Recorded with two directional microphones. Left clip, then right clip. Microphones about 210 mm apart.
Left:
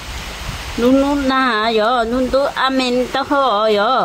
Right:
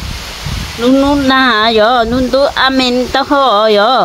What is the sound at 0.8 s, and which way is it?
Speech, 15° right (ahead or behind).